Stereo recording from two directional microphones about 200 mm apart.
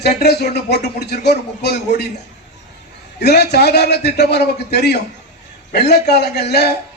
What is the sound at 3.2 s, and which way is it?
A man's voice, 55° left (ahead or behind).